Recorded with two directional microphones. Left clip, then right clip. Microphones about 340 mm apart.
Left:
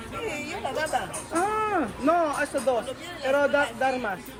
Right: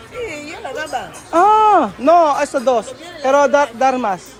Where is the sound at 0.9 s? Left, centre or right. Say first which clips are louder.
Right 11 dB; centre.